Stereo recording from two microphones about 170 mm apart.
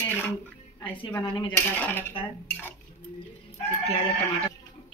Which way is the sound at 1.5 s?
10° left (ahead or behind).